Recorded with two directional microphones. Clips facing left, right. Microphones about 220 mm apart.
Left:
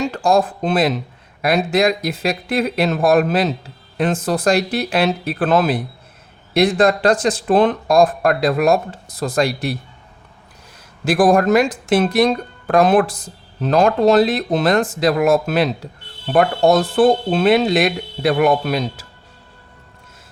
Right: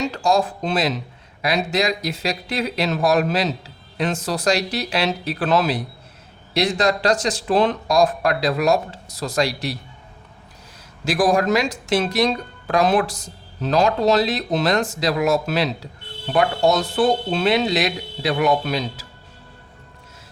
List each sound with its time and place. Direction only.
0.0 s speech: 55° left (ahead or behind)
11.0 s speech: 55° left (ahead or behind)